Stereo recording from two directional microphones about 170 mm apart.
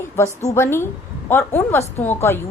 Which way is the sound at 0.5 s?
15° left (ahead or behind).